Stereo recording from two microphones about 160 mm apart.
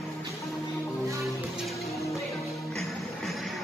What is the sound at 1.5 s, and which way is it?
Music, centre (ahead or behind).